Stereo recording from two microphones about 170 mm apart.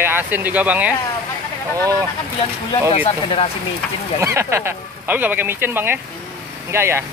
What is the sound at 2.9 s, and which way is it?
Speech, 35° left (ahead or behind).